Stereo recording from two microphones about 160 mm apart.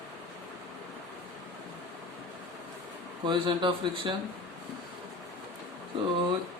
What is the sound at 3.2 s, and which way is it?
Speech, 30° right (ahead or behind).